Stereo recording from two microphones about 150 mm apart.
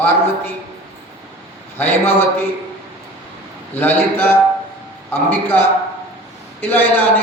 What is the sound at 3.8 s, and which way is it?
A man's voice, 15° left (ahead or behind).